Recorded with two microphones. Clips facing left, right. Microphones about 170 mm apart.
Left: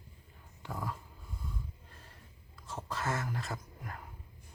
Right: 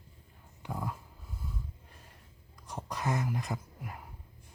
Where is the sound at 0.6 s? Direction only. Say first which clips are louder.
Right 2 dB; 15° right (ahead or behind).